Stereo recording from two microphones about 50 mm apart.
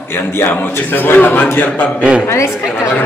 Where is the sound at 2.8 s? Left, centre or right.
Left.